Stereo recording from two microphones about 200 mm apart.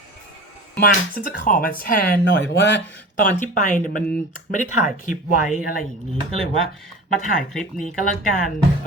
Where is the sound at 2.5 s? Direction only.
60° left (ahead or behind).